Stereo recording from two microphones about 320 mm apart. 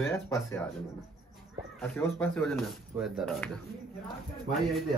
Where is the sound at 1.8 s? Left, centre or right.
Centre.